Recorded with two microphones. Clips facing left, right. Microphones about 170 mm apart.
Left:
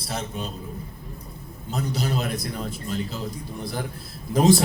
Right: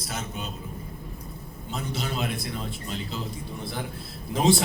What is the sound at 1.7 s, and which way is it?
A man's voice, 40° left (ahead or behind).